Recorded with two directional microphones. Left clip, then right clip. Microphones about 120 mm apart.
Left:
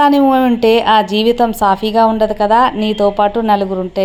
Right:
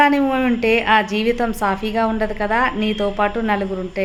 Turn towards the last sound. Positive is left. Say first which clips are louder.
# left 7 dB
turn(degrees=40)  # may be behind; listen again after turning